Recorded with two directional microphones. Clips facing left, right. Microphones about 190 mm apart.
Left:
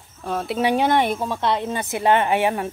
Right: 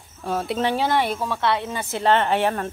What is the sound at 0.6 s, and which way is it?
A woman's voice, 20° left (ahead or behind).